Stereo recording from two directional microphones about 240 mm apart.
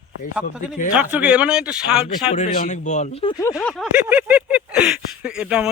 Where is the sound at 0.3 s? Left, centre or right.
Centre.